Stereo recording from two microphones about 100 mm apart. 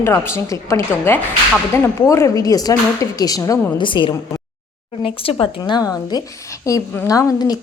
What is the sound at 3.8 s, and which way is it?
Speech, 55° left (ahead or behind).